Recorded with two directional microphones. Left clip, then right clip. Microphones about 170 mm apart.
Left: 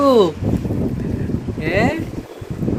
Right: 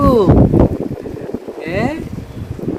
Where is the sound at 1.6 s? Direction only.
5° right (ahead or behind).